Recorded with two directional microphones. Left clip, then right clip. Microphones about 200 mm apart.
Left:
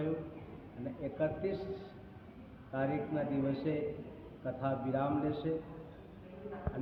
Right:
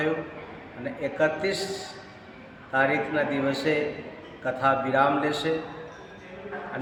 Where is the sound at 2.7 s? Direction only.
45° right (ahead or behind).